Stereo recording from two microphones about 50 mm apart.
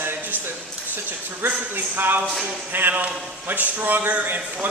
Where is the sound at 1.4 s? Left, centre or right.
Right.